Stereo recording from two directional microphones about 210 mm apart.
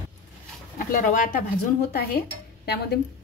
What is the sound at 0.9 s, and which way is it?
Speech, 40° left (ahead or behind).